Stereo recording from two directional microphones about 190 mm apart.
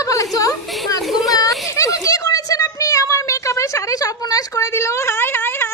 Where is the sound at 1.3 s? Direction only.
20° left (ahead or behind).